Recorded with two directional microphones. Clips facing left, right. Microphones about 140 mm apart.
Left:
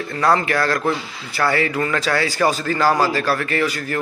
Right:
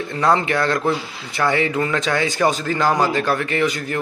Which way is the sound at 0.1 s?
20° right (ahead or behind).